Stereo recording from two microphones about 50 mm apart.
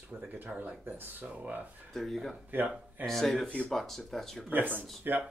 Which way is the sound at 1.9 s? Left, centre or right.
Centre.